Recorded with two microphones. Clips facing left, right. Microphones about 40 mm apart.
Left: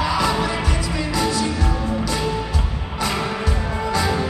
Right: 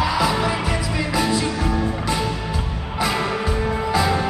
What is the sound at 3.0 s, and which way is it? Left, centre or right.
Music, centre.